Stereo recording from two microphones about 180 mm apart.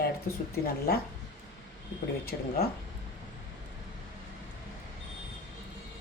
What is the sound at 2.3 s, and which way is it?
Speech, 60° left (ahead or behind).